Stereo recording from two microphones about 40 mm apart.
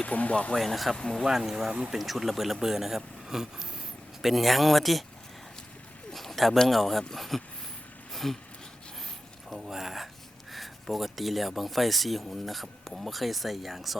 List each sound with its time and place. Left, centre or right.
0.1 s speech: left
0.5 s speech: centre
0.9 s speech: centre
1.2 s speech: centre
6.1 s speech: centre
8.1 s a sound: centre
9.7 s speech: centre